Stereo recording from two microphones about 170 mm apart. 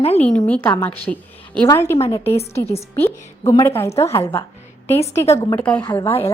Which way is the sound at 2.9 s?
10° left (ahead or behind).